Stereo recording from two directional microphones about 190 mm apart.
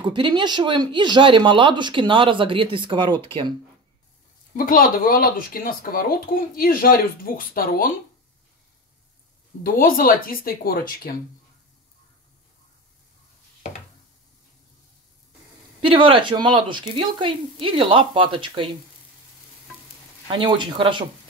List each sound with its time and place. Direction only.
0.0 s speech: 25° right (ahead or behind)
4.6 s speech: 50° left (ahead or behind)
9.6 s speech: 50° left (ahead or behind)
15.8 s speech: 25° right (ahead or behind)
20.2 s speech: 25° right (ahead or behind)